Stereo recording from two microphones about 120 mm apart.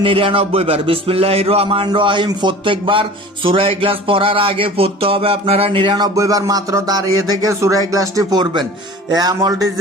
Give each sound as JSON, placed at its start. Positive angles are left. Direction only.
{"t": 0.0, "sound": "music", "side_deg": -50}
{"t": 6.1, "sound": "speech", "side_deg": -30}